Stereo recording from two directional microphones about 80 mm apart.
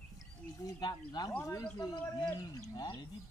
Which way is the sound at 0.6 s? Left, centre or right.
Left.